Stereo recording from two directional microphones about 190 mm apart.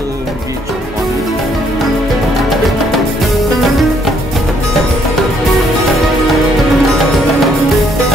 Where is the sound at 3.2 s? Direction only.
Centre (ahead or behind).